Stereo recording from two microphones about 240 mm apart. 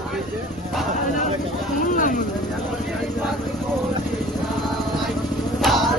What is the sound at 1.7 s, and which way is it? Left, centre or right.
Music, left.